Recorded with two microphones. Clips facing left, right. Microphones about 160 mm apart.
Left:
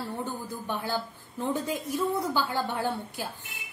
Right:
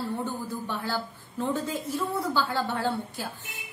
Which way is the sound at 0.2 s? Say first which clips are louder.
Right 2 dB; 15° left (ahead or behind).